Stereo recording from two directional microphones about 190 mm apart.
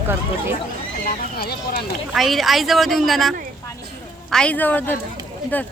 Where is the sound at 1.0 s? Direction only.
50° left (ahead or behind).